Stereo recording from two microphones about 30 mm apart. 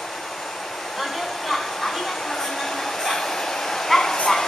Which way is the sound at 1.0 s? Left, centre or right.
Centre.